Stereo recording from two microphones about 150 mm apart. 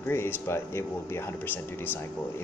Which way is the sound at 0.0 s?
15° left (ahead or behind).